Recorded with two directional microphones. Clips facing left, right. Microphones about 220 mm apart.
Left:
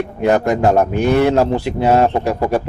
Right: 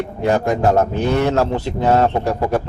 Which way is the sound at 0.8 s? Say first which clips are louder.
Left 3 dB; 15° left (ahead or behind).